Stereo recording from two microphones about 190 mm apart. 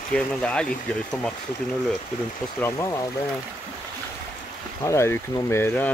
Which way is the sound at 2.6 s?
15° left (ahead or behind).